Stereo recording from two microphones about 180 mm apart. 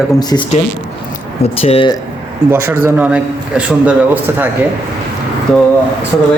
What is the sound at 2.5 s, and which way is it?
A man's voice, 15° right (ahead or behind).